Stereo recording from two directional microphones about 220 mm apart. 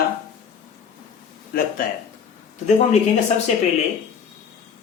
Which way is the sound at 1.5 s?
40° left (ahead or behind).